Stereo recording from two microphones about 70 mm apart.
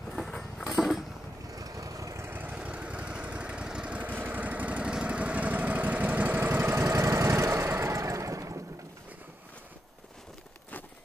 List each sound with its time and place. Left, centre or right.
0.1 s a sound: centre
1.5 s vehicle: right
2.2 s lawn mower: right
6.4 s engine: right
6.9 s vehicle: right